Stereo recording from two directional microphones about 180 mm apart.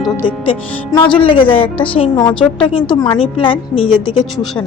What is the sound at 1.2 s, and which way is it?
A woman's voice, 30° left (ahead or behind).